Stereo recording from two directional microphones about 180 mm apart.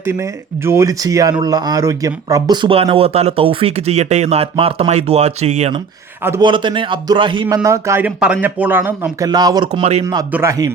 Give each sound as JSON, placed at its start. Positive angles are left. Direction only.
{"t": 0.0, "sound": "speech", "side_deg": -15}
{"t": 6.4, "sound": "a man's voice", "side_deg": -25}
{"t": 7.4, "sound": "a man's voice", "side_deg": -15}